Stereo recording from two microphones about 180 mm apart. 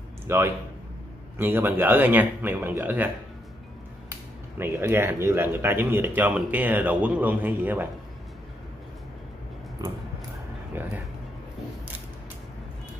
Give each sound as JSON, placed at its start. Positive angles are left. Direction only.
{"t": 0.3, "sound": "speech", "side_deg": -15}
{"t": 4.6, "sound": "speech", "side_deg": -15}
{"t": 9.8, "sound": "a sound", "side_deg": -25}